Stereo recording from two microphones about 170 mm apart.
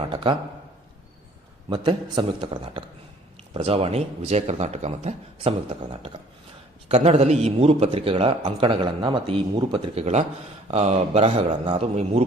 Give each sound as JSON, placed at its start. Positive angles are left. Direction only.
{"t": 0.1, "sound": "a man's voice", "side_deg": -30}
{"t": 1.7, "sound": "a man's voice", "side_deg": -25}
{"t": 11.6, "sound": "a man's voice", "side_deg": -25}